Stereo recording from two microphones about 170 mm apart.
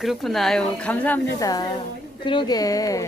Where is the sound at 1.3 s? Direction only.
20° left (ahead or behind).